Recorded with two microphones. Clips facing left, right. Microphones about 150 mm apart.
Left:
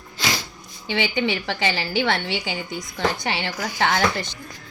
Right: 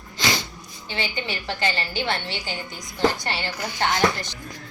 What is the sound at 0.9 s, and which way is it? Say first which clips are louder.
A woman's voice: left 7 dB; 90° left.